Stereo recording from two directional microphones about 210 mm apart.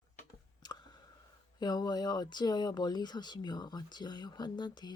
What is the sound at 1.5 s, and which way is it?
Speech, 20° left (ahead or behind).